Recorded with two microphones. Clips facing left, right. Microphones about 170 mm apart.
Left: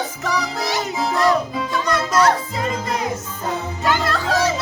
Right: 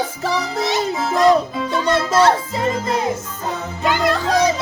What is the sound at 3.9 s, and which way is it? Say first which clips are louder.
Music: right 3 dB; 15° right (ahead or behind).